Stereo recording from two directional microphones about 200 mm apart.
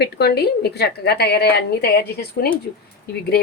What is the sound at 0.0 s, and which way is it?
A woman's voice, 55° left (ahead or behind).